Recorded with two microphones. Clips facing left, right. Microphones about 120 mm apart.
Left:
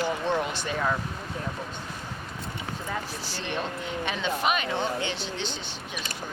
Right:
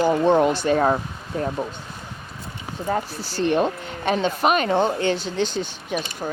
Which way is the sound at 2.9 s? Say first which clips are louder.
Right 12 dB; 40° right (ahead or behind).